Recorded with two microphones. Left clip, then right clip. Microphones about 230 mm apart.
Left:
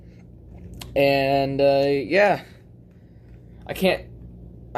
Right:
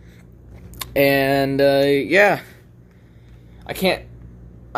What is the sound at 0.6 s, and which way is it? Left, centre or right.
Speech, right.